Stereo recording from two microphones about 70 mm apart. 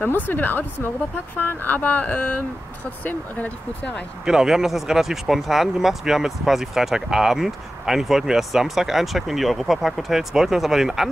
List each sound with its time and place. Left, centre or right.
0.0 s speech: left
4.3 s speech: centre